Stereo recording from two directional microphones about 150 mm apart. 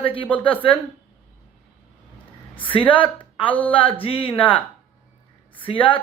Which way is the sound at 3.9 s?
40° left (ahead or behind).